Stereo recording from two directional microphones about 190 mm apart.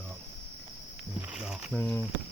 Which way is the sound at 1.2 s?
5° right (ahead or behind).